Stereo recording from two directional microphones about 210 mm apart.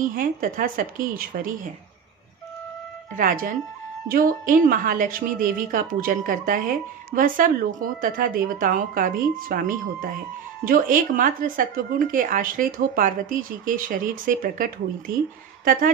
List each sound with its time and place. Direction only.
0.1 s speech: 40° right (ahead or behind)
3.2 s a woman's voice: 40° right (ahead or behind)